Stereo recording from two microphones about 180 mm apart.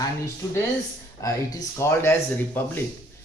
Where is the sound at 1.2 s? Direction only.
20° left (ahead or behind).